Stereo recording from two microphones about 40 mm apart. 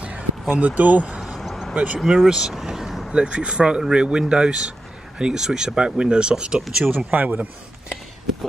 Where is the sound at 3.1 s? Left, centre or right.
Right.